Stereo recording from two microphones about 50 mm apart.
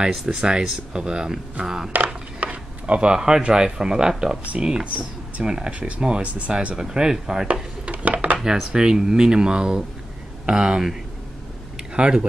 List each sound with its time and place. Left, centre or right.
0.0 s speech: centre
2.4 s a sound: right
3.2 s speech: centre
7.9 s dishes: right
8.5 s speech: centre